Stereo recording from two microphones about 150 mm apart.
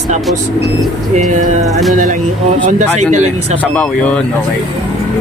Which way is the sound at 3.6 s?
10° left (ahead or behind).